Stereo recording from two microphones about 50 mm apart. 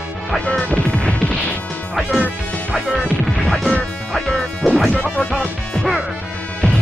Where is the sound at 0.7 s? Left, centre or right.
Left.